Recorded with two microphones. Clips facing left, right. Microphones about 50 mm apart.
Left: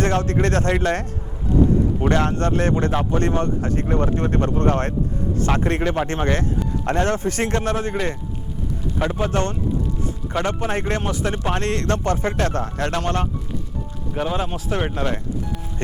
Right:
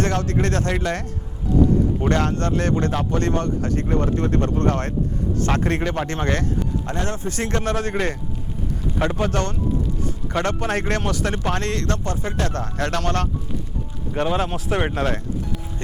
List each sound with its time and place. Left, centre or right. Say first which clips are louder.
0.0 s speech: left 2 dB; left
2.0 s speech: left 1 dB; left
5.5 s speech: left 1 dB; centre
6.8 s speech: left 6 dB; left
7.5 s speech: left 1 dB; centre
9.0 s speech: even; centre
11.5 s speech: left 2 dB; left
14.2 s speech: right 2 dB; centre